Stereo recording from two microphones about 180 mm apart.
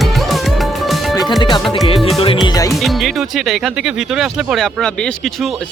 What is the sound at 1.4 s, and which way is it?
Music, 25° left (ahead or behind).